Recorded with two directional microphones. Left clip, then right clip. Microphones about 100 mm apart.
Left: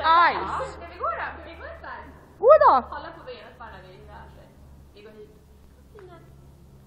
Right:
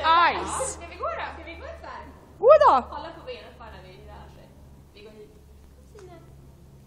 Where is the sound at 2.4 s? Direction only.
5° right (ahead or behind).